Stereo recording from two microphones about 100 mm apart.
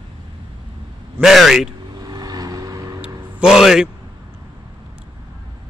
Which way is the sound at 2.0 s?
40° right (ahead or behind).